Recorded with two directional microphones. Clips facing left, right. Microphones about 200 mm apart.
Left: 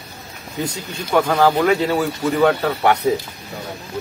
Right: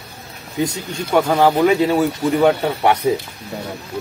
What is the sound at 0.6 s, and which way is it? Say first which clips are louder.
Speech: right 4 dB; 10° right (ahead or behind).